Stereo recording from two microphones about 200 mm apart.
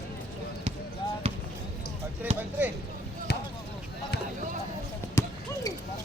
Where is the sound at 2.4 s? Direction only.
10° right (ahead or behind).